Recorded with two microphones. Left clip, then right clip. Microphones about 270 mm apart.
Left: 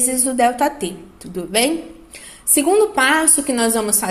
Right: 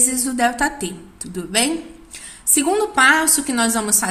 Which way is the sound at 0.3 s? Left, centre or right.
Right.